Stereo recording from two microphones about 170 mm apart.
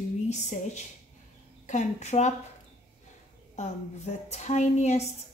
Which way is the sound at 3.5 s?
40° left (ahead or behind).